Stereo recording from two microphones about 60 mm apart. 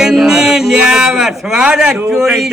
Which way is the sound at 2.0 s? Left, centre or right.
Centre.